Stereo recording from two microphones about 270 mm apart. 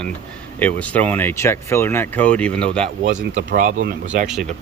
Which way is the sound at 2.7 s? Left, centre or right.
Right.